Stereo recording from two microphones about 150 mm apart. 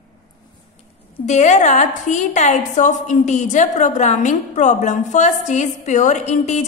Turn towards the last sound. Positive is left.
turn(degrees=50)  # may be behind; listen again after turning